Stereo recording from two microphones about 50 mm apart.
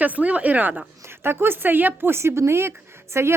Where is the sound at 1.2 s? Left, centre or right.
Right.